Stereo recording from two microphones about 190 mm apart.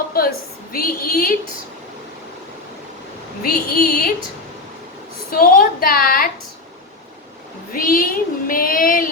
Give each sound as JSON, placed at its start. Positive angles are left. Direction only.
{"t": 0.1, "sound": "a woman's voice", "side_deg": 50}
{"t": 3.4, "sound": "child singing", "side_deg": 50}
{"t": 5.3, "sound": "child singing", "side_deg": 50}
{"t": 7.7, "sound": "child singing", "side_deg": 50}